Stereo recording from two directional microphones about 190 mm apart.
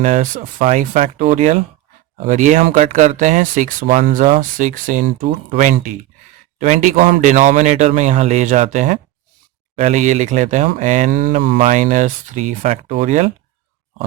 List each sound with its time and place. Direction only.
0.0 s speech: 40° right (ahead or behind)